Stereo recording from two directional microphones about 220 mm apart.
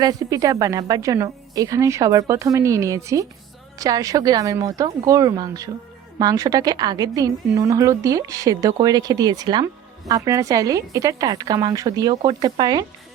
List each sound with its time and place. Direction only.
0.0 s a woman's voice: 15° right (ahead or behind)